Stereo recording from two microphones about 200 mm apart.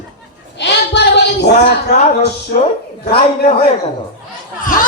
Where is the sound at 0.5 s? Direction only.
60° left (ahead or behind).